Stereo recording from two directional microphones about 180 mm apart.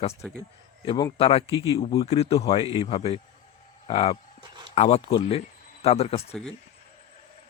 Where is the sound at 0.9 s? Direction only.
25° left (ahead or behind).